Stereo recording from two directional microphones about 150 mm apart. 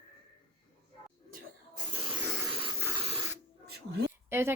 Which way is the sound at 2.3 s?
15° right (ahead or behind).